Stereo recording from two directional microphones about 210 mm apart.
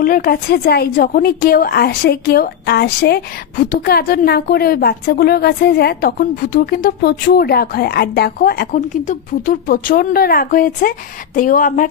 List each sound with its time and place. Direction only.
0.0 s a woman's voice: 45° left (ahead or behind)